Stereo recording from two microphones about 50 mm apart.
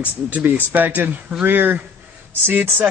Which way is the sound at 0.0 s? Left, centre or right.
Right.